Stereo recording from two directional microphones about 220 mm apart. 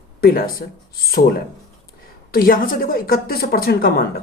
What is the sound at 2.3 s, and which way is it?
A woman's voice, 40° left (ahead or behind).